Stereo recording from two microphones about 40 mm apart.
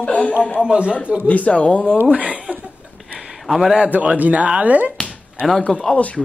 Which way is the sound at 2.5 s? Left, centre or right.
Right.